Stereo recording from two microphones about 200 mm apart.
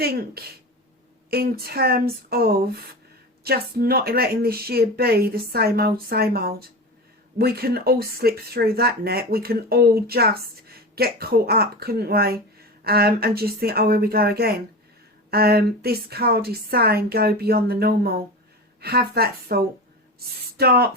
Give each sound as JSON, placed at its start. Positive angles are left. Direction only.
{"t": 0.0, "sound": "speech", "side_deg": -50}